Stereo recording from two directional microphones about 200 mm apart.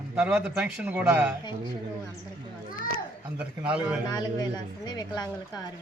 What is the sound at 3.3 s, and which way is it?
Speech, 5° right (ahead or behind).